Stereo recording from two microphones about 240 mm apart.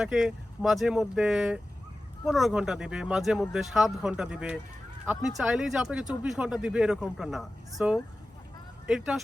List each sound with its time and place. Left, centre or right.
0.0 s speech: centre